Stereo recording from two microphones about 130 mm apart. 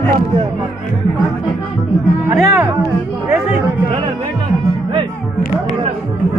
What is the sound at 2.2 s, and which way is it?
Speech, 15° right (ahead or behind).